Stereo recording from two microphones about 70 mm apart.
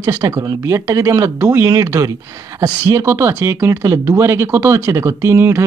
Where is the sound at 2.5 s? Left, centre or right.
Right.